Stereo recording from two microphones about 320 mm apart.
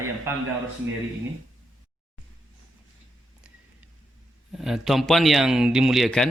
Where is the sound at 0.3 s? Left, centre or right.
Centre.